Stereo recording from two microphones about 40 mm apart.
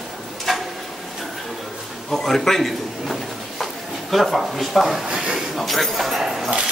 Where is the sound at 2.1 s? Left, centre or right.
Centre.